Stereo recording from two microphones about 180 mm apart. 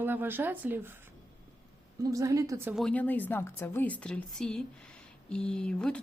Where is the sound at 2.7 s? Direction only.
5° left (ahead or behind).